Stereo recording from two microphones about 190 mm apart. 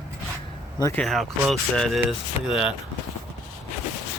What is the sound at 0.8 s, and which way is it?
Speech, 15° left (ahead or behind).